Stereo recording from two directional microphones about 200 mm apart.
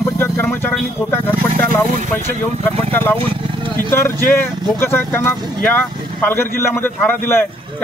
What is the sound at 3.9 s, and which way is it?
Speech, 10° left (ahead or behind).